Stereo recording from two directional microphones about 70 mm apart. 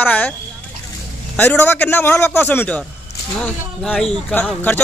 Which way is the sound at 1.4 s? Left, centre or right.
Left.